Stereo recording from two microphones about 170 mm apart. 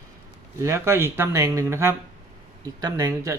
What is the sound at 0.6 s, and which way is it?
Speech, 15° right (ahead or behind).